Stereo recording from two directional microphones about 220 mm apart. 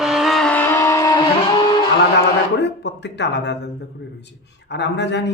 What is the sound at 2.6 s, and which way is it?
Speech, 50° left (ahead or behind).